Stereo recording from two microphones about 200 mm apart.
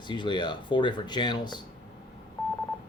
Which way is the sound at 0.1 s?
25° left (ahead or behind).